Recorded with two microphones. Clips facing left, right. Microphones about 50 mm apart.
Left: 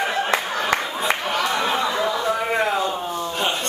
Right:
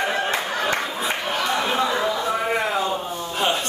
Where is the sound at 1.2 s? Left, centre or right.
Left.